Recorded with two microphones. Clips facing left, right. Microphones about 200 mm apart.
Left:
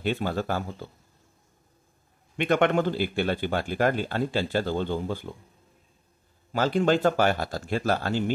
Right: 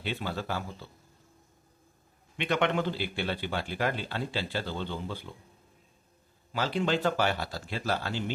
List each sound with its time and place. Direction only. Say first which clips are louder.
0.0 s a man's voice: left 7 dB; 45° left (ahead or behind)
2.3 s a man's voice: left 6 dB; 50° left (ahead or behind)
6.5 s a man's voice: left 6 dB; 45° left (ahead or behind)